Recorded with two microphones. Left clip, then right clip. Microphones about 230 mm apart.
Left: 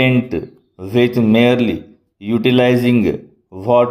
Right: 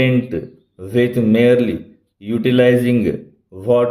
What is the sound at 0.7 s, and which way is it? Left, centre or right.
Speech, left.